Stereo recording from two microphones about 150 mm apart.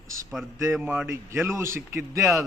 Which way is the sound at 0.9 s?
15° right (ahead or behind).